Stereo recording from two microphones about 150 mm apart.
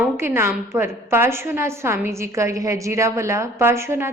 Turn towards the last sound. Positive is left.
turn(degrees=-15)  # may be behind; listen again after turning